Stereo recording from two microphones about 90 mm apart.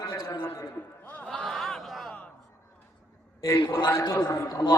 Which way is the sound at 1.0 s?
20° left (ahead or behind).